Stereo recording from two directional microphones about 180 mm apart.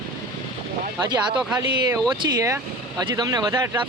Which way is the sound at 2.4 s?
15° right (ahead or behind).